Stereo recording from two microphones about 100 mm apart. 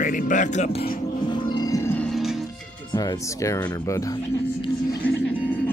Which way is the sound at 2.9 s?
40° left (ahead or behind).